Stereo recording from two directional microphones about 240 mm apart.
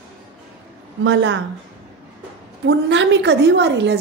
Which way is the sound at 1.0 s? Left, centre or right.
Right.